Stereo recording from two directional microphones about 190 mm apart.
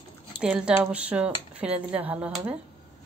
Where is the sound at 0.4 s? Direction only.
5° right (ahead or behind).